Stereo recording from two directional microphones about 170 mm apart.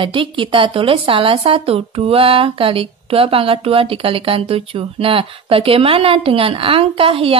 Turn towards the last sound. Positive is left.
turn(degrees=-30)  # may be behind; listen again after turning